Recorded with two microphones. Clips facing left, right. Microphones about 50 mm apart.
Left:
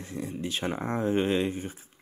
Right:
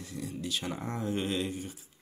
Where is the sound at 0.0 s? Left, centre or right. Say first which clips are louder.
Left 4 dB; left.